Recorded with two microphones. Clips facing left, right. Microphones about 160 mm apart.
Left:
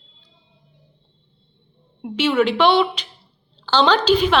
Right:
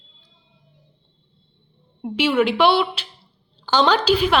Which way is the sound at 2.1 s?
10° right (ahead or behind).